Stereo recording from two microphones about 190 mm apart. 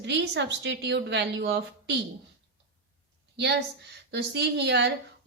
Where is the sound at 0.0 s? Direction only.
65° right (ahead or behind).